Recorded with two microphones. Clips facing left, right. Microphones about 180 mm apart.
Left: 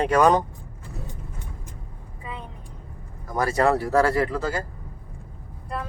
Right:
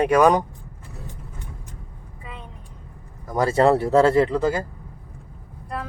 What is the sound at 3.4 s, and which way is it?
Speech, 25° right (ahead or behind).